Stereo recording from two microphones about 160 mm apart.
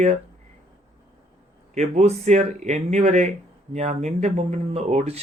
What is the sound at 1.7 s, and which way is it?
Speech, 45° right (ahead or behind).